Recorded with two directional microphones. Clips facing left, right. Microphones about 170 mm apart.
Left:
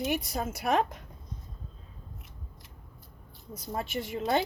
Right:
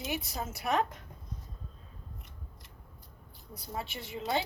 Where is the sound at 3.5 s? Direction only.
45° left (ahead or behind).